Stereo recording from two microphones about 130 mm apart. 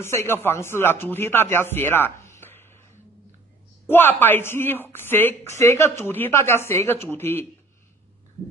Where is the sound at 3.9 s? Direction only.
15° left (ahead or behind).